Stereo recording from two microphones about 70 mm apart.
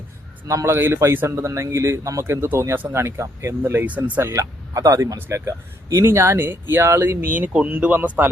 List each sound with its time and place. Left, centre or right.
0.4 s speech: right
1.5 s speech: right
3.6 s speech: right
4.2 s speech: right
5.1 s speech: right
7.6 s speech: right